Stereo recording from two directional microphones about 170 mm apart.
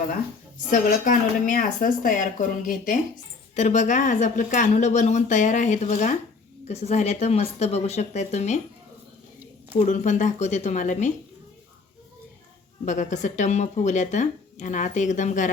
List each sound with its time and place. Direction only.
0.9 s speech: 50° left (ahead or behind)
9.7 s speech: 45° left (ahead or behind)
12.8 s speech: 45° left (ahead or behind)